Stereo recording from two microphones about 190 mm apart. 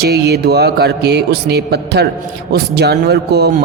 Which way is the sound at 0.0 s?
60° right (ahead or behind).